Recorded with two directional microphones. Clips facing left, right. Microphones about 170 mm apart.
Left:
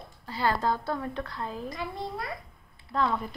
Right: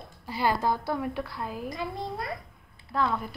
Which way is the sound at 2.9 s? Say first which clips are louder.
Even; 5° right (ahead or behind).